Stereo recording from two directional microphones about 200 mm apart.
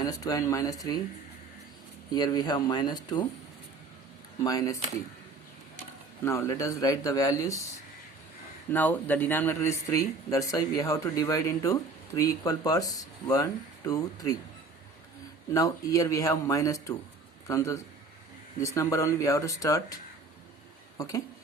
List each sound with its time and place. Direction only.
0.0 s speech: 20° left (ahead or behind)
2.1 s speech: 20° left (ahead or behind)
4.4 s speech: 15° left (ahead or behind)
6.2 s speech: 15° left (ahead or behind)
8.7 s speech: 10° left (ahead or behind)
15.5 s speech: 15° left (ahead or behind)
18.6 s speech: 15° left (ahead or behind)